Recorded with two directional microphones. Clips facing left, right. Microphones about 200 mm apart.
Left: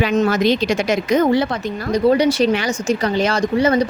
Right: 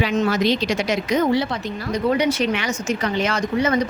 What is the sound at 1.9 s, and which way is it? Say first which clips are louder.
Speech: left 5 dB; 35° left (ahead or behind).